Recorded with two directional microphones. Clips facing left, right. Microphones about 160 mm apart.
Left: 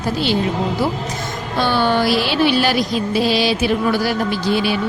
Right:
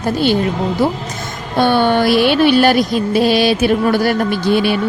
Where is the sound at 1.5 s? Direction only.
55° right (ahead or behind).